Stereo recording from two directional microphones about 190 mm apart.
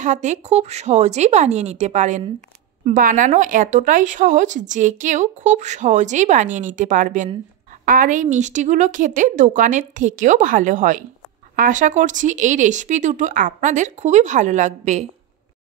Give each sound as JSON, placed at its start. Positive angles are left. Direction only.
{"t": 0.0, "sound": "speech", "side_deg": -40}